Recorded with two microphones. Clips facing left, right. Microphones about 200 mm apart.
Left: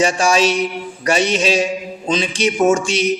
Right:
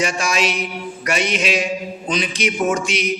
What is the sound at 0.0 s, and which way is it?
A man's voice, 30° left (ahead or behind).